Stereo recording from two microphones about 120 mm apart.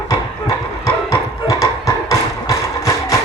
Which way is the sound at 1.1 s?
25° left (ahead or behind).